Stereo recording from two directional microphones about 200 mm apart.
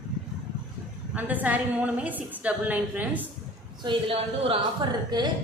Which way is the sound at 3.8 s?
30° right (ahead or behind).